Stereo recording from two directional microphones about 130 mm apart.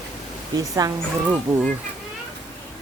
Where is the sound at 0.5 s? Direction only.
30° right (ahead or behind).